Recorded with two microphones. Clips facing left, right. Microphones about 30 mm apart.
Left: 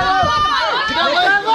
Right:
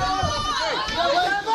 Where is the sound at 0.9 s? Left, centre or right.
Left.